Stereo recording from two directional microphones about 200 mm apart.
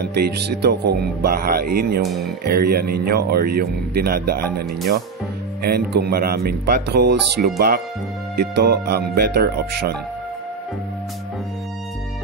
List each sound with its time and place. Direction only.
0.0 s speech: 55° right (ahead or behind)